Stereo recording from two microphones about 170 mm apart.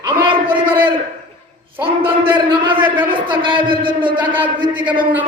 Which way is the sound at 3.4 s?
30° right (ahead or behind).